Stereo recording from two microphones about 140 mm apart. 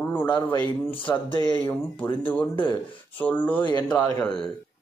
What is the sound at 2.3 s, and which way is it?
Speech, 10° left (ahead or behind).